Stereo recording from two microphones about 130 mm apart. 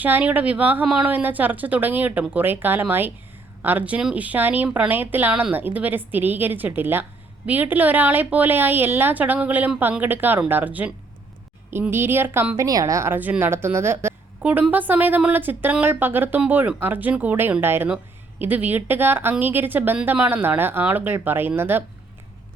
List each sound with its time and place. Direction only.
0.0 s a woman's voice: 15° right (ahead or behind)